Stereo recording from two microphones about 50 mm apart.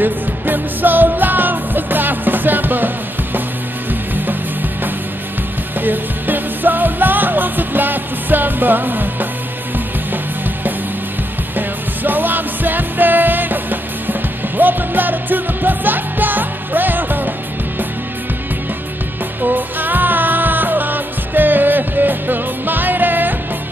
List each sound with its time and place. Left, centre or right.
0.0 s music: right
5.8 s music: right
11.5 s music: right
19.4 s music: right